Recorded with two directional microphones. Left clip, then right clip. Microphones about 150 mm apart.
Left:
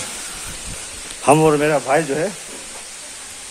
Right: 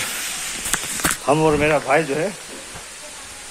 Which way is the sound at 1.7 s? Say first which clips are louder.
Even; 20° left (ahead or behind).